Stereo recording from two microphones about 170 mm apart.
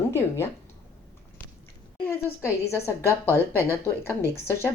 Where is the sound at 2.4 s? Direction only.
15° left (ahead or behind).